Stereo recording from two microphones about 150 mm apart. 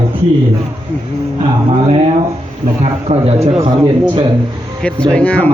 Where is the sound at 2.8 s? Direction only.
40° right (ahead or behind).